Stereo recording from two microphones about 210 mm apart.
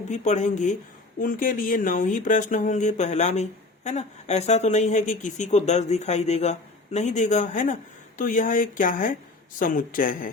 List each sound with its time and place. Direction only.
0.1 s speech: 35° left (ahead or behind)